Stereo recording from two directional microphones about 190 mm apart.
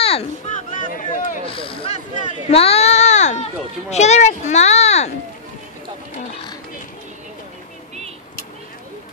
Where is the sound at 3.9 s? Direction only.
35° left (ahead or behind).